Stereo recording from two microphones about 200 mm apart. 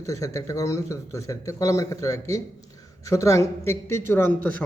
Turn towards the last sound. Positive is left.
turn(degrees=10)  # may be behind; listen again after turning